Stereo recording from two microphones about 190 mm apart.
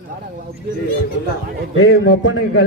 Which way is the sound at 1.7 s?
90° left.